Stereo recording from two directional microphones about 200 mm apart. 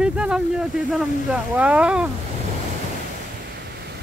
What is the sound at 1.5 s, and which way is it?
Speech, 5° right (ahead or behind).